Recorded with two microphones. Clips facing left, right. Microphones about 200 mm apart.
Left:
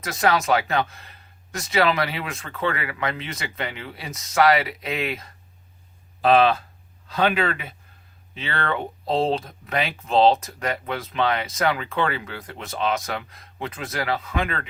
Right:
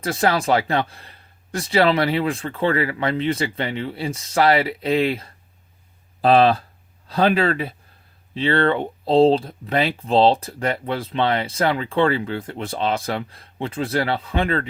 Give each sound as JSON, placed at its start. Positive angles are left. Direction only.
{"t": 0.0, "sound": "speech", "side_deg": -30}